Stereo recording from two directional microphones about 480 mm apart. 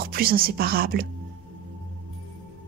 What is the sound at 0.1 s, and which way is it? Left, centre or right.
Speech, centre.